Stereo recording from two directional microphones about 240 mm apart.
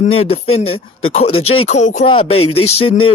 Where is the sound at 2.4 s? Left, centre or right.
Left.